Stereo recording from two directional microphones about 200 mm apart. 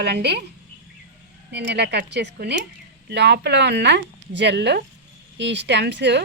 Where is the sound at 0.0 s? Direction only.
55° right (ahead or behind).